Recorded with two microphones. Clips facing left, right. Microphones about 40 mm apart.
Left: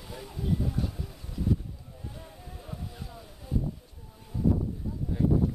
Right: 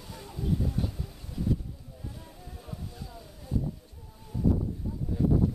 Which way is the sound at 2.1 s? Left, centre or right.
Centre.